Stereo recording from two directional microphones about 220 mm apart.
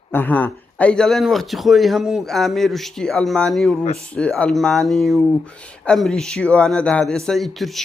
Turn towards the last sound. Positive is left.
turn(degrees=0)  # may be behind; listen again after turning